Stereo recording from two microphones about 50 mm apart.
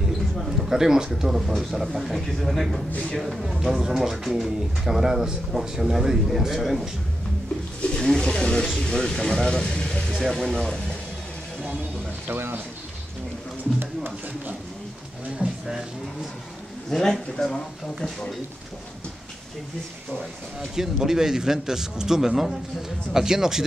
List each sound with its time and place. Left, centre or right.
0.6 s a man's voice: centre
2.9 s speech: left
3.2 s a man's voice: centre
7.8 s pigeon: left
8.2 s a sound: centre
8.8 s speech: centre
12.3 s speech: right
16.9 s speech: centre
20.7 s speech: centre